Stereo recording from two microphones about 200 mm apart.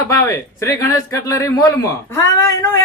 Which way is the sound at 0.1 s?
15° left (ahead or behind).